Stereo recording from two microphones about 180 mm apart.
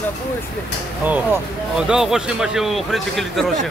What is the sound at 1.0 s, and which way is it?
Speech, 10° right (ahead or behind).